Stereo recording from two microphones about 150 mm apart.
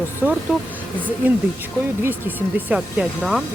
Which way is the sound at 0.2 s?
10° right (ahead or behind).